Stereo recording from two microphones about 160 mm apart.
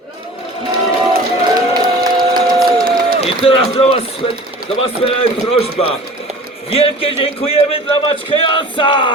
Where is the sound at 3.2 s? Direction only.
35° left (ahead or behind).